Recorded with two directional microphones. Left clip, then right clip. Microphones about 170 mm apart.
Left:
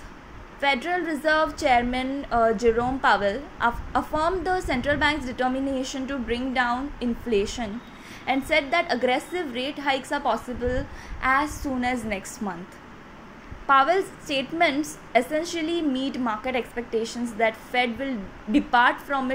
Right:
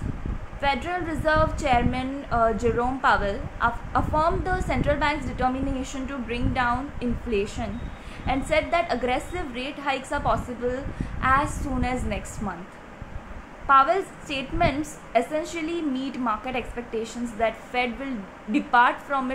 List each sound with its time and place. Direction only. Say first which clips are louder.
0.6 s a woman's voice: left 2 dB; 15° left (ahead or behind)
13.7 s a woman's voice: right 1 dB; 15° left (ahead or behind)